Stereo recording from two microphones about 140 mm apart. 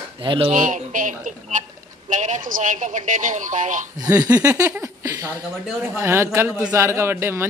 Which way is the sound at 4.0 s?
25° right (ahead or behind).